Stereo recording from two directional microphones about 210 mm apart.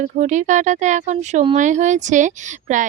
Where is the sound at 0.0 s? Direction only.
35° right (ahead or behind).